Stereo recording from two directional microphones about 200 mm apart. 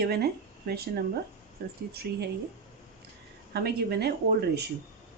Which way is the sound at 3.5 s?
55° right (ahead or behind).